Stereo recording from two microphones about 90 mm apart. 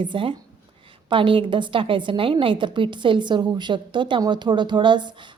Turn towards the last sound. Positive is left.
turn(degrees=-60)  # may be behind; listen again after turning